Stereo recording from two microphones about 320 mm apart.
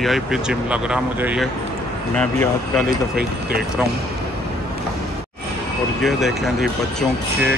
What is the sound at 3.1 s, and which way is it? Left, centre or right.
Speech, right.